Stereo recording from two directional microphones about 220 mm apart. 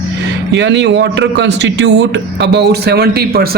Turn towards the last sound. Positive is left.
turn(degrees=-45)  # may be behind; listen again after turning